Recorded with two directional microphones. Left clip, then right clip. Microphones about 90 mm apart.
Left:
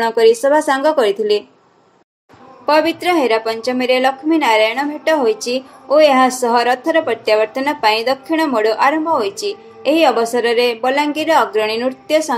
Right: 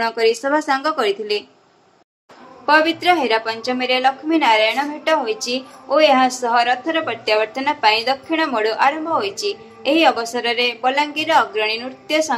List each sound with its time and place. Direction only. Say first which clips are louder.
0.0 s a woman's voice: left 6 dB; 35° left (ahead or behind)
2.6 s a woman's voice: left 1 dB; 40° left (ahead or behind)